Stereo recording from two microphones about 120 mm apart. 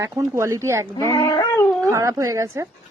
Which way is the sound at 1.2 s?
30° left (ahead or behind).